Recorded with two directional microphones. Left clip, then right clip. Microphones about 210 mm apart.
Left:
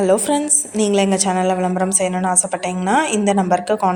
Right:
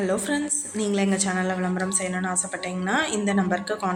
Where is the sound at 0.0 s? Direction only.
30° left (ahead or behind).